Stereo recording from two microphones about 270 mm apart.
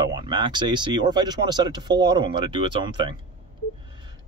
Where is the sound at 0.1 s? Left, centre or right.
Centre.